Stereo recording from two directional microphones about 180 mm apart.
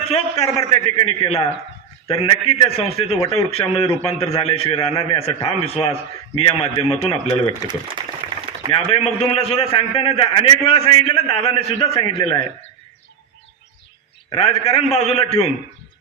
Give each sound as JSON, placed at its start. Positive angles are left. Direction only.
{"t": 0.5, "sound": "a man's voice", "side_deg": 30}
{"t": 7.7, "sound": "speech", "side_deg": -25}
{"t": 8.7, "sound": "a man's voice", "side_deg": 35}
{"t": 14.3, "sound": "a man's voice", "side_deg": 35}